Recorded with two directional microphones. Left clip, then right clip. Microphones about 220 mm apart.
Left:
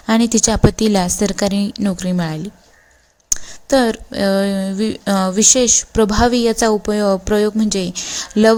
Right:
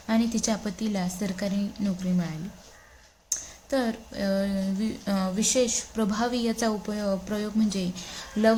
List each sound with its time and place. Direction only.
0.0 s a woman's voice: 40° left (ahead or behind)